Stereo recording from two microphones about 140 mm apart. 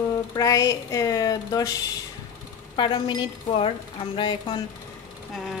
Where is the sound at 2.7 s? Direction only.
35° left (ahead or behind).